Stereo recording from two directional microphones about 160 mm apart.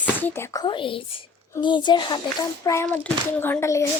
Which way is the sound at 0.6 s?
30° left (ahead or behind).